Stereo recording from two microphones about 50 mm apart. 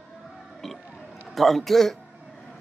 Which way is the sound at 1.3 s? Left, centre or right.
Centre.